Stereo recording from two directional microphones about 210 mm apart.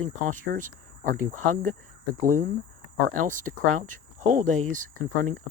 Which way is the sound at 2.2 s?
40° right (ahead or behind).